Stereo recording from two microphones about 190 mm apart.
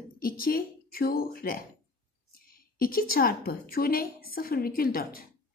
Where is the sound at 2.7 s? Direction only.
50° left (ahead or behind).